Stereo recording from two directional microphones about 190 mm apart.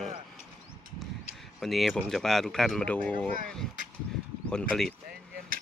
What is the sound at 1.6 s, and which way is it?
Speech, centre (ahead or behind).